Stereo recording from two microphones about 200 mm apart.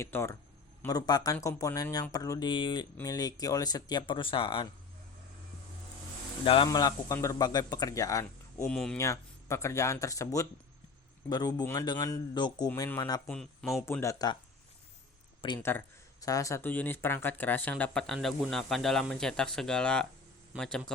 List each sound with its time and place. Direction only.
0.0 s speech: 10° left (ahead or behind)
6.4 s speech: 25° left (ahead or behind)
8.6 s speech: 5° left (ahead or behind)
9.0 s speech: 15° left (ahead or behind)
13.2 s speech: 5° left (ahead or behind)
13.8 s speech: 15° left (ahead or behind)
15.4 s speech: 25° left (ahead or behind); by 20.9 s 5° left (ahead or behind)